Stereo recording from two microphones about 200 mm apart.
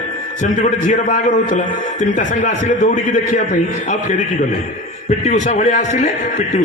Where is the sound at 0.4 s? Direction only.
40° left (ahead or behind).